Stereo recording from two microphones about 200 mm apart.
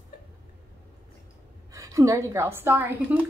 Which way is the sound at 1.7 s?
15° right (ahead or behind).